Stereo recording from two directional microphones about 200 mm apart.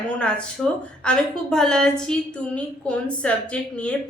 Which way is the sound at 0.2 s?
5° left (ahead or behind).